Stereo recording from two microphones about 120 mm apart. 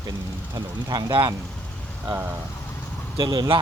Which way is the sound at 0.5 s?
35° right (ahead or behind).